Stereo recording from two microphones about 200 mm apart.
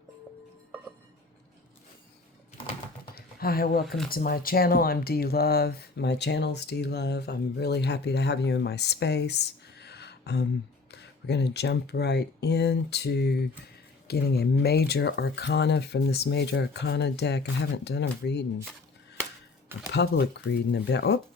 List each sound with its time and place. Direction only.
3.2 s a sound: 50° left (ahead or behind)
3.8 s speech: centre (ahead or behind)
4.1 s speech: 45° left (ahead or behind)
19.9 s speech: 55° left (ahead or behind)